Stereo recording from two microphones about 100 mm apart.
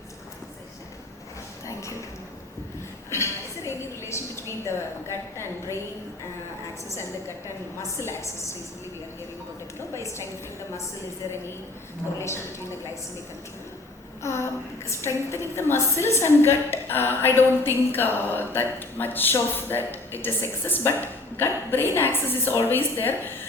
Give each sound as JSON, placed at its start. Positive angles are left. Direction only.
{"t": 1.6, "sound": "a sound", "side_deg": 30}
{"t": 3.1, "sound": "a sound", "side_deg": 30}
{"t": 5.4, "sound": "a woman's voice", "side_deg": 25}
{"t": 6.8, "sound": "a woman's voice", "side_deg": 25}
{"t": 9.9, "sound": "a woman's voice", "side_deg": 30}
{"t": 12.2, "sound": "a woman's voice", "side_deg": 25}
{"t": 14.2, "sound": "a woman's voice", "side_deg": 25}